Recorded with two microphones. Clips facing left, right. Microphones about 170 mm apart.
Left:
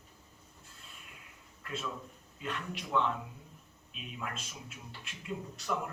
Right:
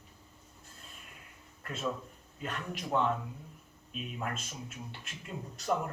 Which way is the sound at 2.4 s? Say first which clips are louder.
Right 1 dB; 45° right (ahead or behind).